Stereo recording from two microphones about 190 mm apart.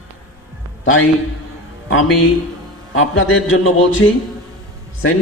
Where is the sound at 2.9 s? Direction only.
90° left.